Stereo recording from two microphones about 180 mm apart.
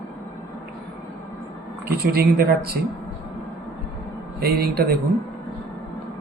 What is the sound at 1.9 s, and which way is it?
Speech, 60° right (ahead or behind).